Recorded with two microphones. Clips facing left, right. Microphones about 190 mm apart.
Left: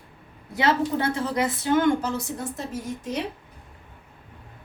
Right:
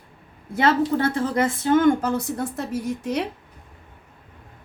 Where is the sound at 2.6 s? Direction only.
65° right (ahead or behind).